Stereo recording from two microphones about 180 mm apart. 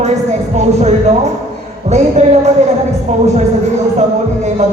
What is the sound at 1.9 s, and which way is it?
Speech, 40° right (ahead or behind).